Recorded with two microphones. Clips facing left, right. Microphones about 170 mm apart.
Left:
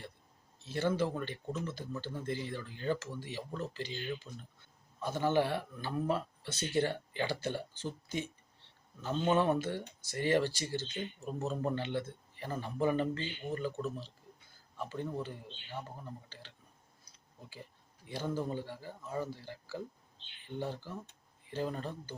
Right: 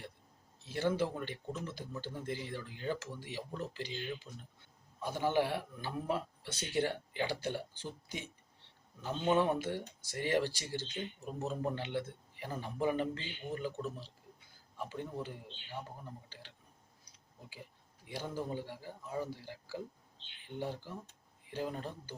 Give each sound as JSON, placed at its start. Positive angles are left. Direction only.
{"t": 0.6, "sound": "speech", "side_deg": -15}
{"t": 16.3, "sound": "a sound", "side_deg": -10}
{"t": 18.1, "sound": "speech", "side_deg": -10}